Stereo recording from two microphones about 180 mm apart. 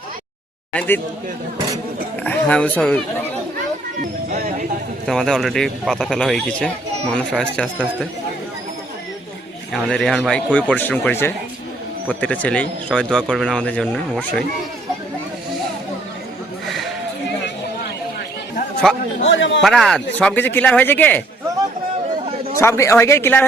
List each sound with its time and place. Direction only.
0.7 s speech: 10° left (ahead or behind)
2.2 s speech: 5° left (ahead or behind)
5.0 s speech: centre (ahead or behind)
9.7 s speech: centre (ahead or behind)
16.6 s a sound: centre (ahead or behind)
18.8 s speech: 5° left (ahead or behind)
19.2 s speech: 85° left
19.6 s speech: centre (ahead or behind)
22.5 s speech: 15° left (ahead or behind)